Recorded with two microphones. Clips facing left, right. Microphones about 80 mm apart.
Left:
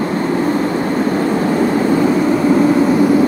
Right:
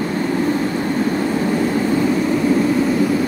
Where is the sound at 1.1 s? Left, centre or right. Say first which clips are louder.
Left 4 dB; left.